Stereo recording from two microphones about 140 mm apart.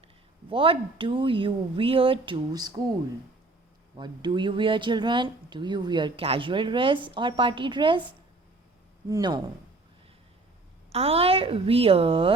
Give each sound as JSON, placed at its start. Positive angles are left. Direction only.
{"t": 0.5, "sound": "speech", "side_deg": -40}
{"t": 3.9, "sound": "speech", "side_deg": -35}
{"t": 9.0, "sound": "speech", "side_deg": -30}
{"t": 10.9, "sound": "a woman's voice", "side_deg": -45}